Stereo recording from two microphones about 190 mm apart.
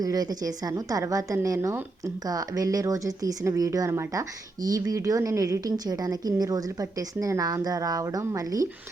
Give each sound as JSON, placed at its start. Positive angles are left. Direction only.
{"t": 0.0, "sound": "speech", "side_deg": -20}